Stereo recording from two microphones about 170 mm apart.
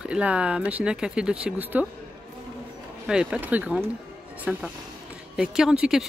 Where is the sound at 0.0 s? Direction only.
5° right (ahead or behind).